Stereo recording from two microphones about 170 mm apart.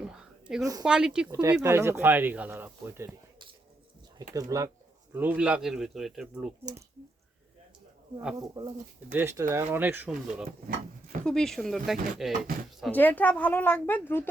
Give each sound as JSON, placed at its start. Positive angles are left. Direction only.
{"t": 0.0, "sound": "a sound", "side_deg": -5}
{"t": 0.6, "sound": "speech", "side_deg": -20}
{"t": 0.9, "sound": "speech", "side_deg": -5}
{"t": 1.3, "sound": "speech", "side_deg": -20}
{"t": 4.4, "sound": "speech", "side_deg": -20}
{"t": 5.1, "sound": "speech", "side_deg": -10}
{"t": 8.4, "sound": "speech", "side_deg": -25}
{"t": 11.3, "sound": "speech", "side_deg": 5}
{"t": 12.8, "sound": "a woman's voice", "side_deg": 10}